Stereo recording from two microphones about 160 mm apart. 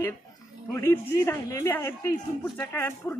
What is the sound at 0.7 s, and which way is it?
Speech, 15° left (ahead or behind).